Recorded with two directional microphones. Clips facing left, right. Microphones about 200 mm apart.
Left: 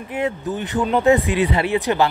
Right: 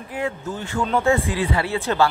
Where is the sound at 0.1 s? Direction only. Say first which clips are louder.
Left 4 dB; 20° left (ahead or behind).